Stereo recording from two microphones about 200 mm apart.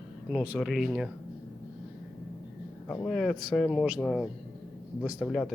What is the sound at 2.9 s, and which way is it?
Speech, 5° left (ahead or behind).